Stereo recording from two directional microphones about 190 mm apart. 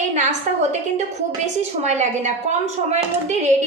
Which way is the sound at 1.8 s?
35° right (ahead or behind).